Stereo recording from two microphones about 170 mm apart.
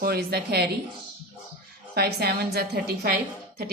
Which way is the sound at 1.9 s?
70° right (ahead or behind).